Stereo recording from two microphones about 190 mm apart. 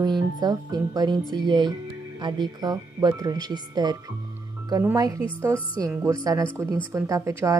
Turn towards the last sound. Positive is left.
turn(degrees=-15)  # may be behind; listen again after turning